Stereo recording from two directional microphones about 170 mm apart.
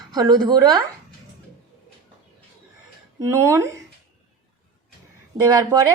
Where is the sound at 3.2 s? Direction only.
20° right (ahead or behind).